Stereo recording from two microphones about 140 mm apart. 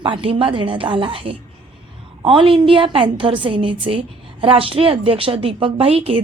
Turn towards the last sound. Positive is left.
turn(degrees=-45)  # may be behind; listen again after turning